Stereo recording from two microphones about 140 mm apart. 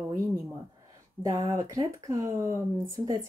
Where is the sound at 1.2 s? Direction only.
25° right (ahead or behind).